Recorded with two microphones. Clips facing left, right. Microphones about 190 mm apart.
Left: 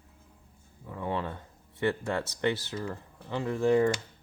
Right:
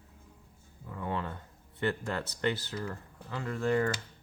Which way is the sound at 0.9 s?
20° left (ahead or behind).